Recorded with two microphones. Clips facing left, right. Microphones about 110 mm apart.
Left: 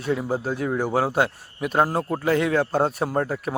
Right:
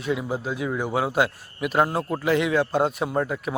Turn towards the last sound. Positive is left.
turn(degrees=35)  # may be behind; listen again after turning